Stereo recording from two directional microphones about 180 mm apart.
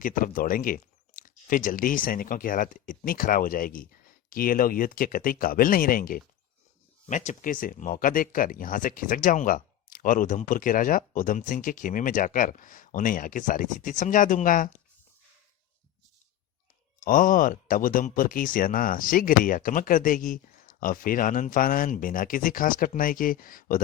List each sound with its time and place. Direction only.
0.0 s speech: 50° left (ahead or behind)
17.0 s speech: 50° left (ahead or behind)